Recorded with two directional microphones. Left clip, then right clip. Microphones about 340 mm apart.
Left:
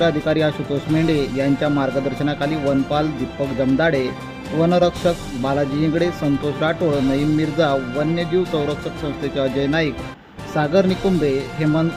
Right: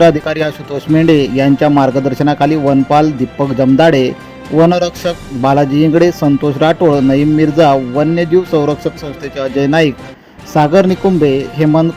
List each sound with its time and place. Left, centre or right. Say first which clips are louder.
0.0 s speech: right 8 dB; centre